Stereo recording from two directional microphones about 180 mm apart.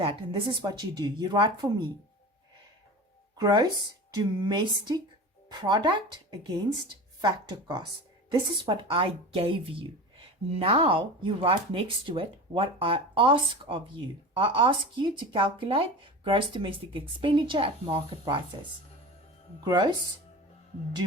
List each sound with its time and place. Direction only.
0.0 s speech: 30° right (ahead or behind)
3.3 s speech: 20° right (ahead or behind)
19.6 s speech: 25° right (ahead or behind)